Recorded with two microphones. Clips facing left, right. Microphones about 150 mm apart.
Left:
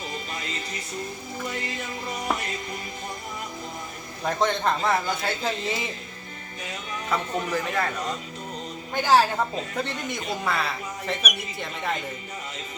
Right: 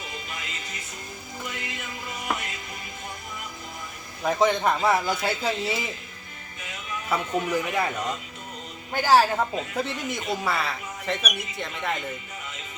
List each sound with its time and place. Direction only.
0.1 s music: 35° left (ahead or behind)
4.2 s speech: 5° right (ahead or behind)
7.1 s speech: 10° right (ahead or behind)
8.9 s speech: 5° right (ahead or behind)